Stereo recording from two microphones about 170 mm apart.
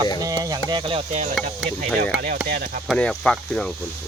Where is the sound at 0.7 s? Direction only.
30° right (ahead or behind).